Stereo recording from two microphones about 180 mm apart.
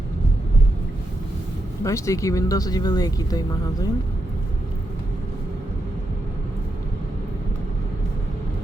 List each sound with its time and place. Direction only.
1.8 s speech: 15° left (ahead or behind)